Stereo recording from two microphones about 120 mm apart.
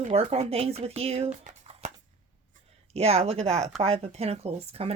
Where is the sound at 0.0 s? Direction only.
65° right (ahead or behind).